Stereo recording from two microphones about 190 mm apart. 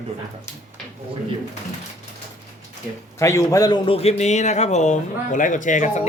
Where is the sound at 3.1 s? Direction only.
15° left (ahead or behind).